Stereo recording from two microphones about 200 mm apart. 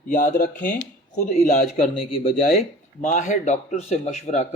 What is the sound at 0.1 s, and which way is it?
A man's voice, 40° left (ahead or behind).